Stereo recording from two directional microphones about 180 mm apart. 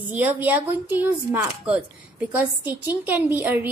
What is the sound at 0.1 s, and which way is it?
A woman's voice, 10° right (ahead or behind).